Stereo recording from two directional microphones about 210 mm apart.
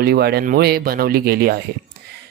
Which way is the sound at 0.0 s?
50° right (ahead or behind).